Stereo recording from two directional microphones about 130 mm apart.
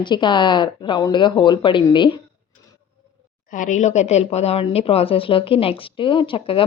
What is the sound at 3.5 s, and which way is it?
A woman's voice, 80° left.